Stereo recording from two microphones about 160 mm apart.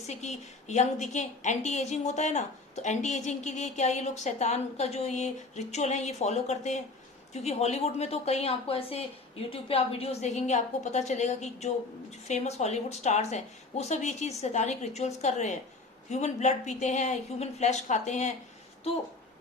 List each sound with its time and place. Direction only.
0.1 s a woman's voice: 45° left (ahead or behind)